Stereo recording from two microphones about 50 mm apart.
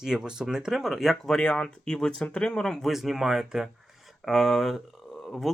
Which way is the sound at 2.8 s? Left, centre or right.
Centre.